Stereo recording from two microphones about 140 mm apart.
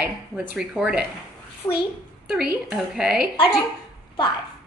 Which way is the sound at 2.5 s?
10° right (ahead or behind).